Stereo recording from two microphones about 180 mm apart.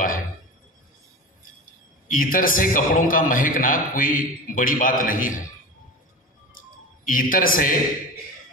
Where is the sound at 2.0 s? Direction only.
50° left (ahead or behind).